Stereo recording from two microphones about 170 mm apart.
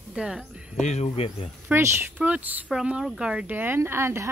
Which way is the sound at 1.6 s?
15° right (ahead or behind).